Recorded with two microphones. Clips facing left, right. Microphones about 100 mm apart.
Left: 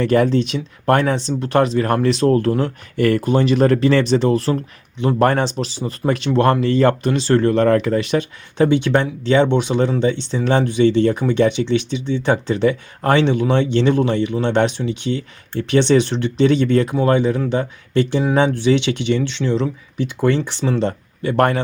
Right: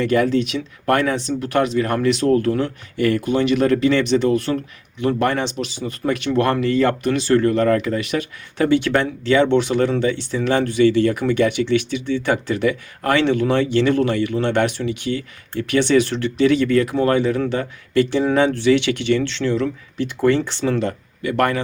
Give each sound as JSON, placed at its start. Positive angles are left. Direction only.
{"t": 0.0, "sound": "speech", "side_deg": 35}
{"t": 5.2, "sound": "speech", "side_deg": 40}